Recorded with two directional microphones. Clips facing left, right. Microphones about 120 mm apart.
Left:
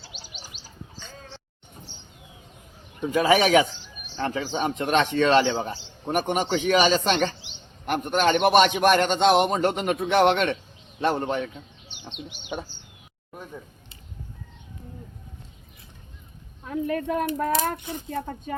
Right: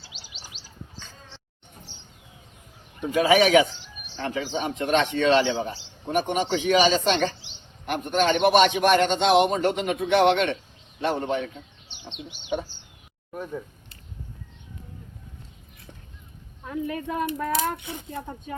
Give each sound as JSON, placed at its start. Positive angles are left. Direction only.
{"t": 0.0, "sound": "bird", "side_deg": 50}
{"t": 3.2, "sound": "speech", "side_deg": 40}
{"t": 16.8, "sound": "speech", "side_deg": 55}